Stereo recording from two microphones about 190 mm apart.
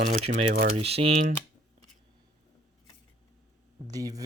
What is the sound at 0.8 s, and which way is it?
Speech, 30° right (ahead or behind).